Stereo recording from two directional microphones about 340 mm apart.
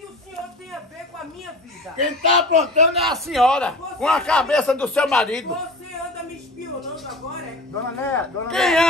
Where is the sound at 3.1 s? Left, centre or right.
Centre.